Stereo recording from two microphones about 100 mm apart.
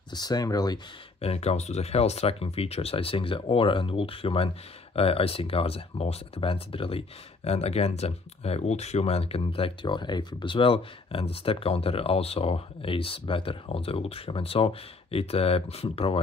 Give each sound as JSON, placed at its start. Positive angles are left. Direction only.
{"t": 0.1, "sound": "speech", "side_deg": 40}
{"t": 1.2, "sound": "speech", "side_deg": 90}